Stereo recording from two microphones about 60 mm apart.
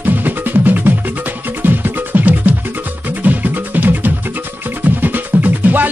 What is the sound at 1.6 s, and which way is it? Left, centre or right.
Music, right.